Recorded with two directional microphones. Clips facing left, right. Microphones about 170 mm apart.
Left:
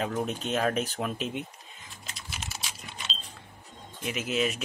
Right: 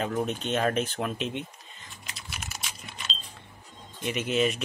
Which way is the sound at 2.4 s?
30° left (ahead or behind).